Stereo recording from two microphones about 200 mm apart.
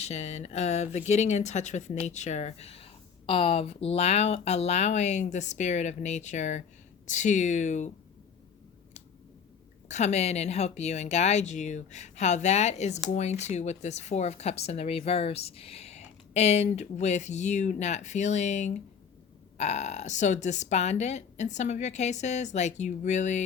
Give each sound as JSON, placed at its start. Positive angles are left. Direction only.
{"t": 0.0, "sound": "speech", "side_deg": 35}
{"t": 9.9, "sound": "speech", "side_deg": 35}